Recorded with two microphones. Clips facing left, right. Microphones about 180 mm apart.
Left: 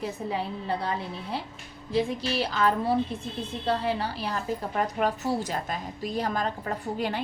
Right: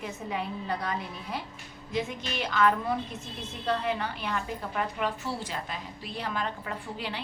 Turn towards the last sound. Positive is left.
turn(degrees=45)  # may be behind; listen again after turning